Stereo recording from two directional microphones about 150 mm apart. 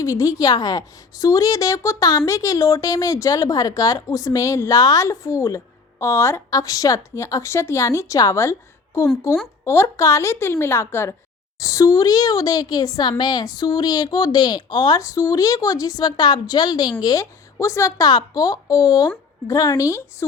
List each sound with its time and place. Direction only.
0.0 s a woman's voice: 20° left (ahead or behind)